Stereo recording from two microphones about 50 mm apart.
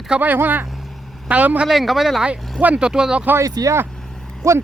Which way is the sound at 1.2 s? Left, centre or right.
Right.